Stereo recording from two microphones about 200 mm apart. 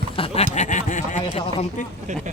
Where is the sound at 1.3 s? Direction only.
25° left (ahead or behind).